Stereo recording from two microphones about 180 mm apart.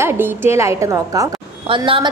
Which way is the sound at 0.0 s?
15° right (ahead or behind).